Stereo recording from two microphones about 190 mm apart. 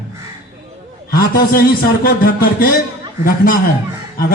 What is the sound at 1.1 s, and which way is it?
A man's voice, 50° left (ahead or behind).